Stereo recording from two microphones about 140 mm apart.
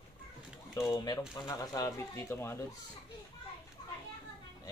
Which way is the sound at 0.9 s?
30° left (ahead or behind).